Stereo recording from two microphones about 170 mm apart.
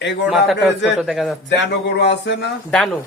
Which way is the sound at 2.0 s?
90° left.